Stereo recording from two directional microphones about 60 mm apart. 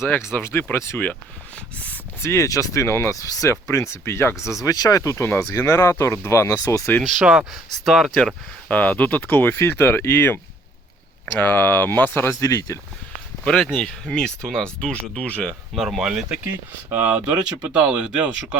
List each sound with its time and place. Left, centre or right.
0.3 s speech: left
2.2 s speech: left
2.8 s speech: left
3.2 s speech: left
3.5 s speech: left
4.6 s speech: left
7.3 s speech: centre
7.9 s speech: centre
8.7 s speech: left
12.3 s speech: left
13.4 s speech: centre
15.7 s speech: centre
16.9 s speech: right
17.6 s speech: centre